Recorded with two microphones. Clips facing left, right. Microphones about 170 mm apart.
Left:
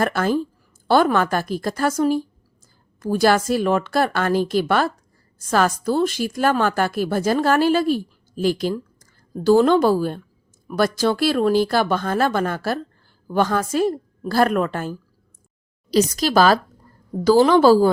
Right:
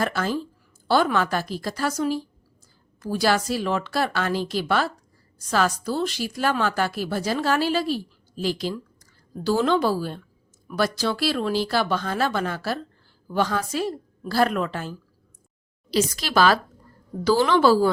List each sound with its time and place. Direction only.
0.0 s speech: 50° left (ahead or behind)